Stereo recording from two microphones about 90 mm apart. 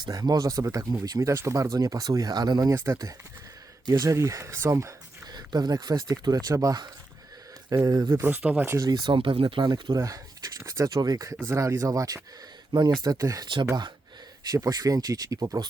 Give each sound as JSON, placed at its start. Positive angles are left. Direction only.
{"t": 0.0, "sound": "speech", "side_deg": -45}
{"t": 1.3, "sound": "speech", "side_deg": -35}
{"t": 3.8, "sound": "speech", "side_deg": -50}
{"t": 4.1, "sound": "speech", "side_deg": -35}
{"t": 5.3, "sound": "speech", "side_deg": -50}
{"t": 8.1, "sound": "speech", "side_deg": -25}
{"t": 8.8, "sound": "speech", "side_deg": -50}
{"t": 9.1, "sound": "speech", "side_deg": -80}
{"t": 10.0, "sound": "a sound", "side_deg": -40}
{"t": 10.6, "sound": "speech", "side_deg": -40}
{"t": 11.4, "sound": "speech", "side_deg": -35}
{"t": 12.7, "sound": "speech", "side_deg": -55}
{"t": 14.5, "sound": "speech", "side_deg": -40}